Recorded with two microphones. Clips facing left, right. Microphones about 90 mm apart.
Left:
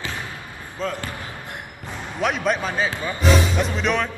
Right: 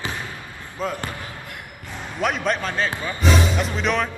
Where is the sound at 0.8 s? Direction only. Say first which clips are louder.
Even; 10° right (ahead or behind).